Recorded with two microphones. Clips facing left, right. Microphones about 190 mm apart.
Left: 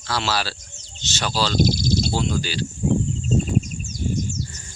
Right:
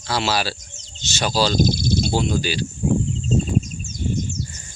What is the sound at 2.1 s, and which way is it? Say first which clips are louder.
Speech: right 3 dB; 15° right (ahead or behind).